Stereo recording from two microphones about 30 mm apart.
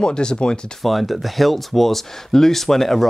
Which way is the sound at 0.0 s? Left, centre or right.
Left.